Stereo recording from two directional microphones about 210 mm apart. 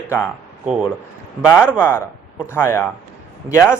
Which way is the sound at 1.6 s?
10° left (ahead or behind).